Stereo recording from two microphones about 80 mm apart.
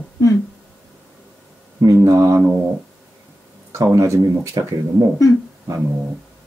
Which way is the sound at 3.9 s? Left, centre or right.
Right.